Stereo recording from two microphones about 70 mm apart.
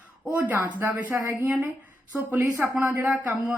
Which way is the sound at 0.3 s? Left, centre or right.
Right.